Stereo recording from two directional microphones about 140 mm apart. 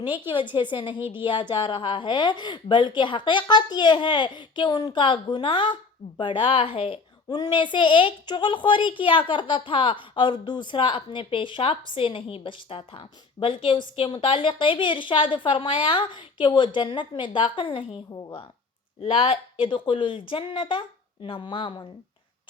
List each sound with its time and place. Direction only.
0.3 s a woman's voice: 35° left (ahead or behind)